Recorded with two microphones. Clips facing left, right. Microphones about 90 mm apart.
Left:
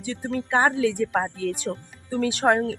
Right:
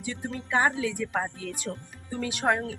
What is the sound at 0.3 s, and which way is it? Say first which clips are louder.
A woman's voice: left 4 dB; 55° left (ahead or behind).